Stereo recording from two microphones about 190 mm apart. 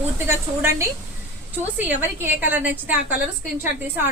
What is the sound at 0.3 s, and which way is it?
Speech, 15° right (ahead or behind).